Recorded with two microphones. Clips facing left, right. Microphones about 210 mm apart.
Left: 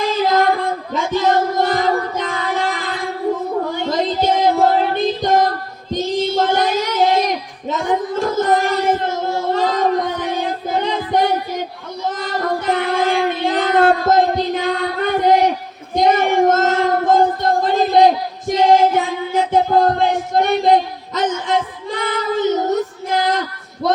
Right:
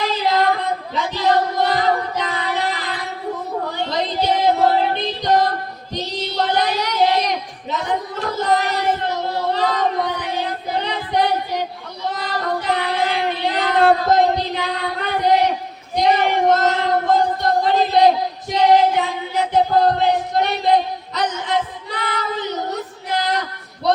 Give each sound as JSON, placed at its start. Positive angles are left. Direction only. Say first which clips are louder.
{"t": 0.0, "sound": "female singing", "louder": "left 3 dB", "side_deg": 50}
{"t": 0.9, "sound": "music", "louder": "left 2 dB", "side_deg": 45}
{"t": 3.7, "sound": "female singing", "louder": "left 4 dB", "side_deg": 45}
{"t": 7.7, "sound": "a sound", "louder": "left 4 dB", "side_deg": 45}
{"t": 12.1, "sound": "child singing", "louder": "left 2 dB", "side_deg": 45}
{"t": 14.3, "sound": "singing", "louder": "left 5 dB", "side_deg": 45}
{"t": 18.4, "sound": "music", "louder": "left 2 dB", "side_deg": 45}